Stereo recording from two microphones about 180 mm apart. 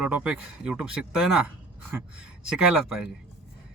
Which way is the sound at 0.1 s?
5° right (ahead or behind).